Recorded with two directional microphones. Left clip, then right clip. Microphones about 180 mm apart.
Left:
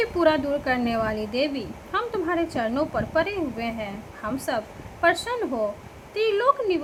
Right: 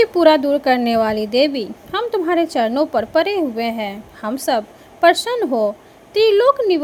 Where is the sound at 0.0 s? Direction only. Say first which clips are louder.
Right 9 dB; 35° right (ahead or behind).